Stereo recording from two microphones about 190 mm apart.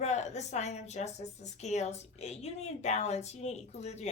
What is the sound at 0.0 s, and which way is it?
Speech, 35° left (ahead or behind).